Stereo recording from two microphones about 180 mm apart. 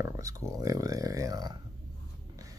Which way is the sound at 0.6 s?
20° right (ahead or behind).